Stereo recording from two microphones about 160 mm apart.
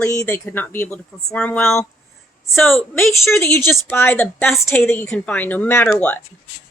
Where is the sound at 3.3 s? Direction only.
15° left (ahead or behind).